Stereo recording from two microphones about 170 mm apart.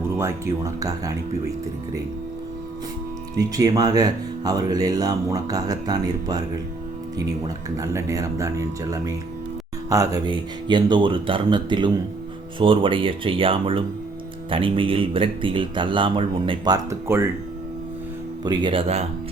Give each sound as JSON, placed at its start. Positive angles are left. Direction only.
{"t": 0.2, "sound": "speech", "side_deg": -15}
{"t": 3.3, "sound": "speech", "side_deg": -20}
{"t": 18.4, "sound": "speech", "side_deg": -25}